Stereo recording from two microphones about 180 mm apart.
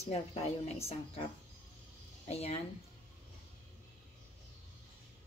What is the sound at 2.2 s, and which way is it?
Speech, 35° left (ahead or behind).